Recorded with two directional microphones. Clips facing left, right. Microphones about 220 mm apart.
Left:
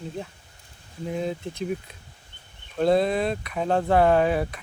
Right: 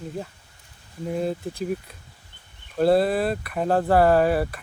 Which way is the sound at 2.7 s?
5° right (ahead or behind).